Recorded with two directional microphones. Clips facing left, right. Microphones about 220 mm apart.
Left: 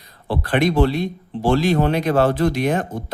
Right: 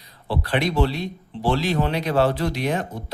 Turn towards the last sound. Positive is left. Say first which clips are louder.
# left 4 dB
turn(degrees=50)  # may be behind; listen again after turning